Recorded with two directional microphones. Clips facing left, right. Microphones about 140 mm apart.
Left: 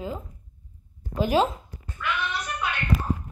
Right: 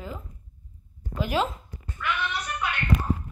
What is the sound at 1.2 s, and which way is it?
Speech, 30° left (ahead or behind).